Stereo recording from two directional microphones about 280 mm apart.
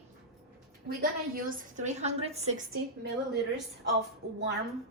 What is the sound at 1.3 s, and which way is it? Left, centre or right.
A woman's voice, right.